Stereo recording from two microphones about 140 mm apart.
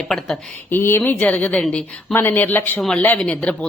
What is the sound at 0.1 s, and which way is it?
Speech, 5° left (ahead or behind).